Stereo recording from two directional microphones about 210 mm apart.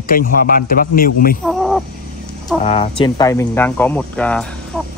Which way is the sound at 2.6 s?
25° left (ahead or behind).